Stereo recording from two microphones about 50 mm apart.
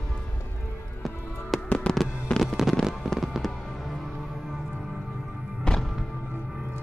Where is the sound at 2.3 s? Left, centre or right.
Left.